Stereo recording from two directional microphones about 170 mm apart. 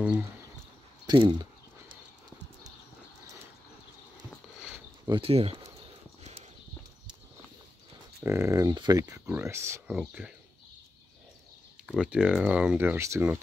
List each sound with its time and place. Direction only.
1.0 s speech: 25° right (ahead or behind)
5.1 s speech: 35° right (ahead or behind)
8.2 s speech: 15° right (ahead or behind)
9.9 s speech: 5° right (ahead or behind)
11.8 s speech: centre (ahead or behind)